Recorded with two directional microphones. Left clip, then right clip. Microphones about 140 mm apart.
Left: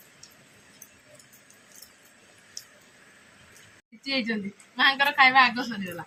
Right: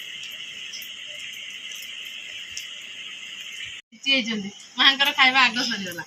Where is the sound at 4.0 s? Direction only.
20° left (ahead or behind).